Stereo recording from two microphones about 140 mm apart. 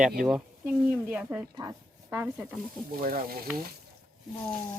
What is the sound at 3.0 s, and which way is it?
Frying, 90° right.